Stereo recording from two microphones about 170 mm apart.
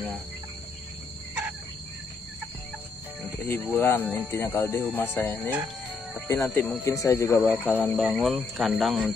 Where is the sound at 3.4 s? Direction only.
10° left (ahead or behind).